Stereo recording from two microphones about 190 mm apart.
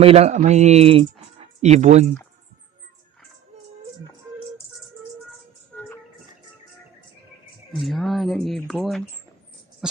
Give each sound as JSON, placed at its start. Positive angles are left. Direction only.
{"t": 0.0, "sound": "speech", "side_deg": -35}
{"t": 7.8, "sound": "speech", "side_deg": 0}